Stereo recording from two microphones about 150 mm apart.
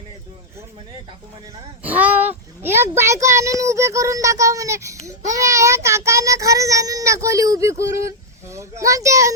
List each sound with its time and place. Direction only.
1.8 s a child's voice: 10° right (ahead or behind)